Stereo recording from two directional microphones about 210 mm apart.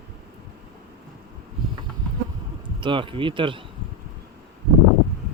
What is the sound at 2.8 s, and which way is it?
Speech, 25° right (ahead or behind).